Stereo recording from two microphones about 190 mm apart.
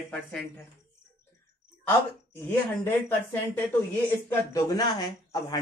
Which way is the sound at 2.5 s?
10° left (ahead or behind).